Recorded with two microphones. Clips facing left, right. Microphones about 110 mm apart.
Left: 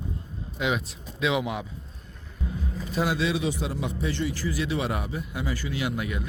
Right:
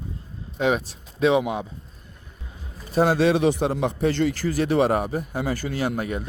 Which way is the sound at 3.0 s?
45° right (ahead or behind).